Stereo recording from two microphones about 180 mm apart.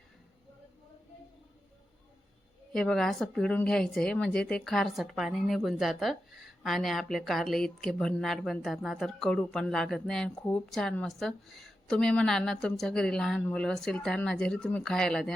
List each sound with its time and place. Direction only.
2.7 s a woman's voice: 5° left (ahead or behind)